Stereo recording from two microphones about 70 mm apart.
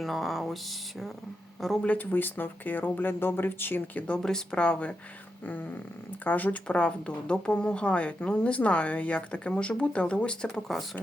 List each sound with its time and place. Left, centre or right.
0.0 s speech: centre
1.8 s speech: left
4.2 s speech: centre
10.5 s speech: centre